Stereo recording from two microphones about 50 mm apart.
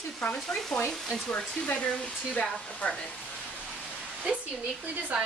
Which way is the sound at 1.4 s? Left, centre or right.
Centre.